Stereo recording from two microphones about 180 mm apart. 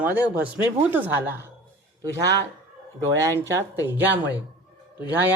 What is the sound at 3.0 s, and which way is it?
Speech, 20° right (ahead or behind).